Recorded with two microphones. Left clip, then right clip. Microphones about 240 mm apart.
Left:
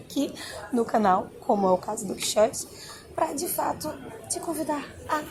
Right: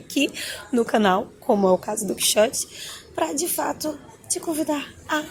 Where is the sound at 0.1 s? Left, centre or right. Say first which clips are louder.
Right 6 dB; right.